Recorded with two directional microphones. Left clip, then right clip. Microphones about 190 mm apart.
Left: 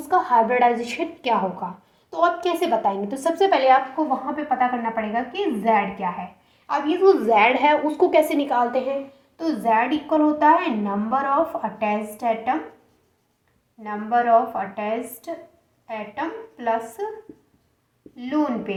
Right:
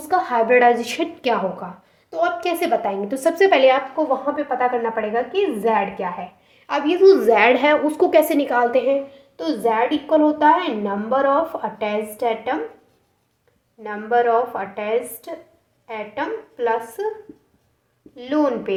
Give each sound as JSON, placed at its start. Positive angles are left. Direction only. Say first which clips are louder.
{"t": 0.1, "sound": "a woman's voice", "louder": "right 2 dB", "side_deg": -30}
{"t": 13.8, "sound": "a woman's voice", "louder": "right 2 dB", "side_deg": -45}
{"t": 18.2, "sound": "a woman's voice", "louder": "right 4 dB", "side_deg": -40}